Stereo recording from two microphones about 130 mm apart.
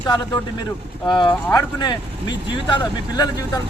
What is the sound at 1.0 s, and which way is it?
Speech, 40° left (ahead or behind).